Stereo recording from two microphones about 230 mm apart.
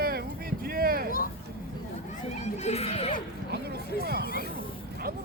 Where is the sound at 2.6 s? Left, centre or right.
Left.